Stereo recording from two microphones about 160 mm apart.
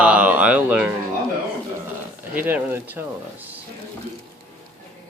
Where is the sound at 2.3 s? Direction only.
10° right (ahead or behind).